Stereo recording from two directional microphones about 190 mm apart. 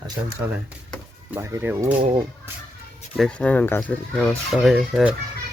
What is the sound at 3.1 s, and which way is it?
Speech, 5° left (ahead or behind).